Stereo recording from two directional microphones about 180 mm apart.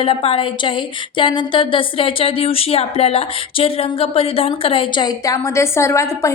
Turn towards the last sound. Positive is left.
turn(degrees=15)  # may be behind; listen again after turning